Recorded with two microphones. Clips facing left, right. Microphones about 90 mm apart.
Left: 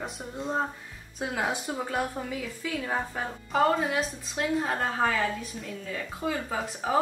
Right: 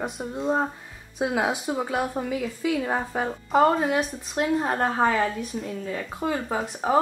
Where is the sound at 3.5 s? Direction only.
40° right (ahead or behind).